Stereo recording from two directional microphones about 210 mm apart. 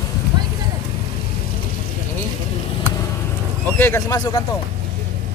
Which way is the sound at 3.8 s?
15° left (ahead or behind).